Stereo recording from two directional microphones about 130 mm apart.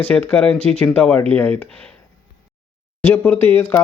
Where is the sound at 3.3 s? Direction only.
15° left (ahead or behind).